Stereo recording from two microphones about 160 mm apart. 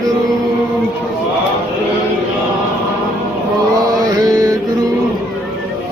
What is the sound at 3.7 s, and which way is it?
Mantra, 25° right (ahead or behind).